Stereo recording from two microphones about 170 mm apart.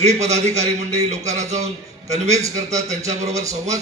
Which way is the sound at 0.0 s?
40° right (ahead or behind).